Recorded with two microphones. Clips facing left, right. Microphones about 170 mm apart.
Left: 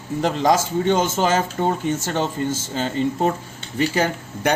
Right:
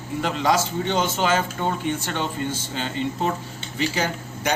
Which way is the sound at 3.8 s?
55° left (ahead or behind).